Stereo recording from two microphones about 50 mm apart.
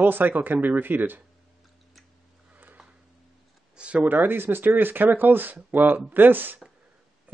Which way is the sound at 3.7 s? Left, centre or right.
Right.